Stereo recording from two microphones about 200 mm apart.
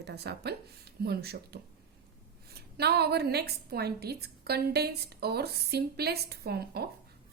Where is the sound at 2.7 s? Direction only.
55° right (ahead or behind).